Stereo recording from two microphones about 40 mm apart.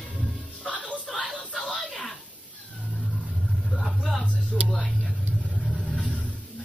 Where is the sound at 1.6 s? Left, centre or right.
Centre.